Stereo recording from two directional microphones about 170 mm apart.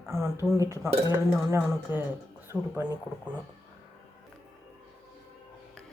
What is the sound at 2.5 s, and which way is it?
Speech, 5° left (ahead or behind).